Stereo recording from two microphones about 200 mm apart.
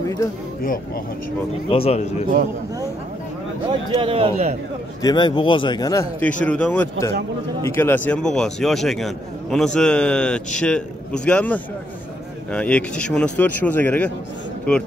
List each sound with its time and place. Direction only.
0.0 s speech: 15° left (ahead or behind)
1.7 s speech: 30° left (ahead or behind)
3.9 s a man's voice: 25° right (ahead or behind)
5.0 s a man's voice: 20° left (ahead or behind); by 14.8 s 5° left (ahead or behind)